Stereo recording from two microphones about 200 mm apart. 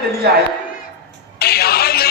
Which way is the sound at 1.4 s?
50° left (ahead or behind).